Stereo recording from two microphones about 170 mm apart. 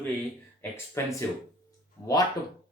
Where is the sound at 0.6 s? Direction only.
15° left (ahead or behind).